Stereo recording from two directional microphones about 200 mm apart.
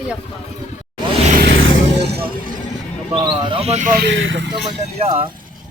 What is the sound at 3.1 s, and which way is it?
Speech, 25° right (ahead or behind).